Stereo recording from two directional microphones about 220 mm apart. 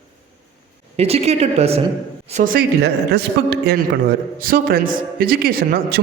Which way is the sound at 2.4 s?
40° right (ahead or behind).